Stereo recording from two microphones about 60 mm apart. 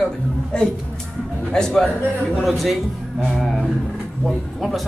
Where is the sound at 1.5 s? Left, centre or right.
Centre.